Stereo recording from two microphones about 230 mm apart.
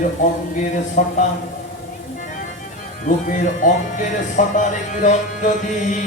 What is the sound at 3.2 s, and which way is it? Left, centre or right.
Speech, left.